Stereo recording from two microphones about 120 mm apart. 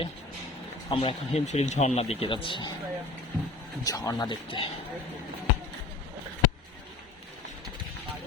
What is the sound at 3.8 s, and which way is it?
Speech, 30° left (ahead or behind).